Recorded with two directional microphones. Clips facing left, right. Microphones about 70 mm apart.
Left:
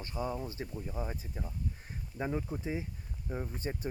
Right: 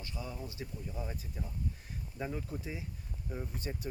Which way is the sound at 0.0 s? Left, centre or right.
Left.